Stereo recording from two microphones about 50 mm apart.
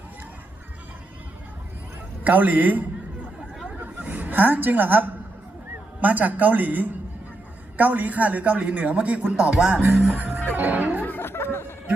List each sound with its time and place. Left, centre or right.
2.2 s speech: right
3.7 s a sound: right
6.0 s speech: right
11.0 s music: left